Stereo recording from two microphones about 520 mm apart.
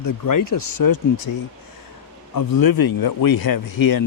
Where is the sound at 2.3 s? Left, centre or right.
Left.